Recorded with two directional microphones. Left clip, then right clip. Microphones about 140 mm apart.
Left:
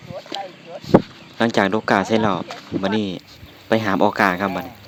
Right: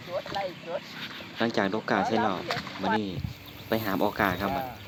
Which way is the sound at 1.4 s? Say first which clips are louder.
Left 9 dB; 75° left (ahead or behind).